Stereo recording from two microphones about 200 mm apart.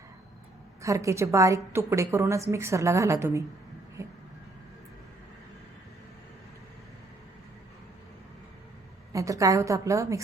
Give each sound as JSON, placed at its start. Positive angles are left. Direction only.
{"t": 0.8, "sound": "a woman's voice", "side_deg": -15}
{"t": 4.0, "sound": "vehicle", "side_deg": -15}
{"t": 9.1, "sound": "a woman's voice", "side_deg": -15}